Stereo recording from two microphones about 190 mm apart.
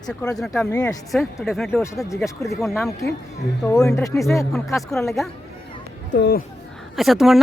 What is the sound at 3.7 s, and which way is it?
Speech, 15° left (ahead or behind).